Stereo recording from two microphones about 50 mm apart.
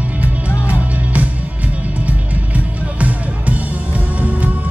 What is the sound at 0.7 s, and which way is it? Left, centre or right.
Music, right.